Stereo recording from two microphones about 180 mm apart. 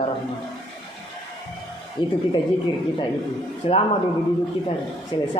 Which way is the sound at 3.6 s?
30° left (ahead or behind).